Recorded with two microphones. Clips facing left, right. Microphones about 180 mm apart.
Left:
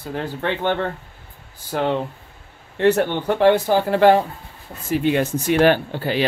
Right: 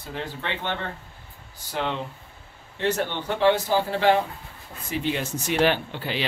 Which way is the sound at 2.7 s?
60° left (ahead or behind).